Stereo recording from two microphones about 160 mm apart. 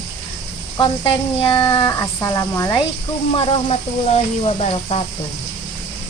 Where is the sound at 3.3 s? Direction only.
35° left (ahead or behind).